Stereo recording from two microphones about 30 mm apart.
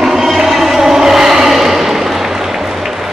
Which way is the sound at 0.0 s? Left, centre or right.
Centre.